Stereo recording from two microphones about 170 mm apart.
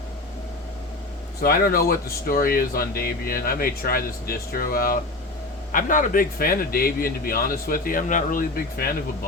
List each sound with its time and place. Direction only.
1.4 s speech: 60° left (ahead or behind)